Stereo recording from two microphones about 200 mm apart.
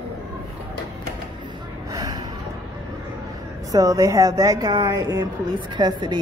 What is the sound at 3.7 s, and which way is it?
Speech, 15° right (ahead or behind).